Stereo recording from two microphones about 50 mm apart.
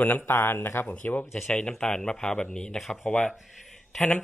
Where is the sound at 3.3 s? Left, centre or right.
Centre.